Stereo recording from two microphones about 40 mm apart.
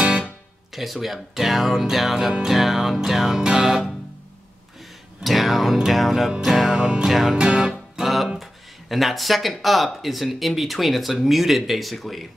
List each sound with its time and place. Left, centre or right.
0.0 s guitar: right
0.7 s speech: centre
3.3 s music: centre
5.2 s speech: centre
6.8 s music: right
7.1 s speech: centre
7.3 s music: right
8.0 s music: centre
8.4 s speech: centre